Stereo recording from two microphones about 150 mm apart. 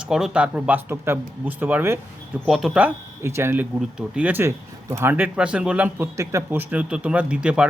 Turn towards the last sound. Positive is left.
turn(degrees=-5)  # may be behind; listen again after turning